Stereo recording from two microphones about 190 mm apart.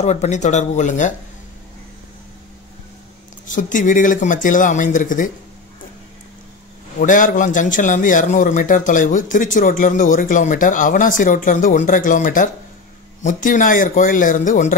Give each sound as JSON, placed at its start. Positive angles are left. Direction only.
{"t": 0.0, "sound": "speech", "side_deg": 35}
{"t": 3.4, "sound": "a man's voice", "side_deg": 45}
{"t": 7.0, "sound": "a man's voice", "side_deg": 45}